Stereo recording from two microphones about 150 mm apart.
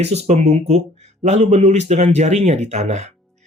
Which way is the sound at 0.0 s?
45° right (ahead or behind).